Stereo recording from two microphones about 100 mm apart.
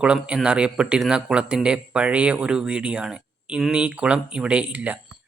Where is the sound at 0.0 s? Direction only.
10° right (ahead or behind).